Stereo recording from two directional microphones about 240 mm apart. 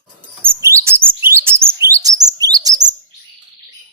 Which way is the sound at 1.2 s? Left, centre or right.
Centre.